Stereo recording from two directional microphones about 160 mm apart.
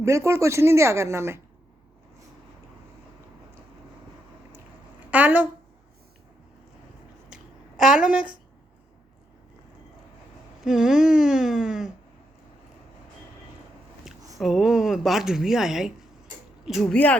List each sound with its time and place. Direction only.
0.0 s speech: 15° right (ahead or behind)
5.1 s speech: 10° right (ahead or behind)
7.3 s a sound: 5° right (ahead or behind)
10.6 s a woman's voice: 5° right (ahead or behind)
14.3 s a woman's voice: centre (ahead or behind)